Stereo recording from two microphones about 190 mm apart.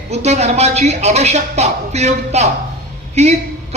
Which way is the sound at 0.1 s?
35° right (ahead or behind).